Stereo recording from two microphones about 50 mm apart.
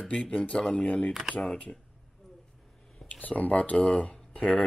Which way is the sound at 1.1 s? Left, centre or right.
Centre.